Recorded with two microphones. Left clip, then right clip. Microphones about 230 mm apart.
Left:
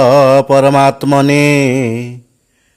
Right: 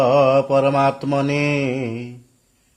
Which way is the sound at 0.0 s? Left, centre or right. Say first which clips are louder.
Left 7 dB; left.